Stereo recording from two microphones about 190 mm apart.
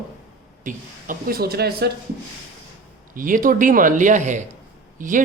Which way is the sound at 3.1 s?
45° right (ahead or behind).